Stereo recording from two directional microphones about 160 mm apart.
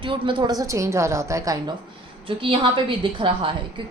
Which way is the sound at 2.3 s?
35° right (ahead or behind).